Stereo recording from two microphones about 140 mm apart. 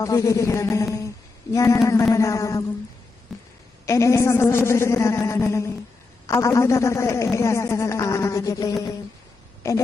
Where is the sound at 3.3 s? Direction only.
Centre (ahead or behind).